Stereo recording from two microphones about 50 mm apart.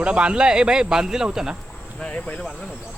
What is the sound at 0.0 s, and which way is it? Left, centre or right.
Speech, right.